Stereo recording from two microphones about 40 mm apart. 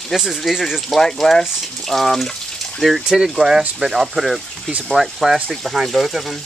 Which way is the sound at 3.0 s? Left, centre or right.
Centre.